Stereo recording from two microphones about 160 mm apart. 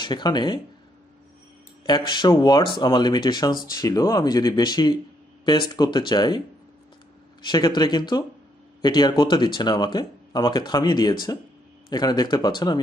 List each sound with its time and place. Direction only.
0.0 s speech: 25° left (ahead or behind)
1.9 s speech: 25° left (ahead or behind)
7.4 s speech: 25° left (ahead or behind)